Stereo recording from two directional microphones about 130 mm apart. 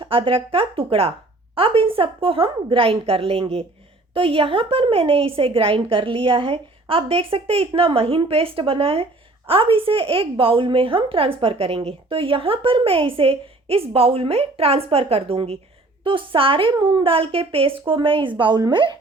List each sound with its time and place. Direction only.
0.0 s a woman's voice: 45° right (ahead or behind)